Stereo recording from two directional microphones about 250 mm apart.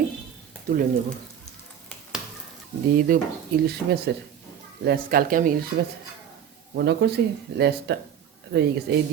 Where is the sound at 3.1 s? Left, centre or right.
Right.